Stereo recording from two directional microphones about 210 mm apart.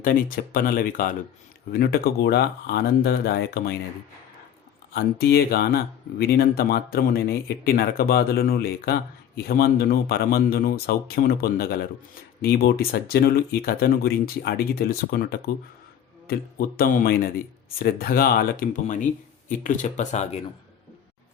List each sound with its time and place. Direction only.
0.0 s speech: 45° left (ahead or behind)
4.9 s speech: 50° left (ahead or behind); by 20.4 s 30° left (ahead or behind)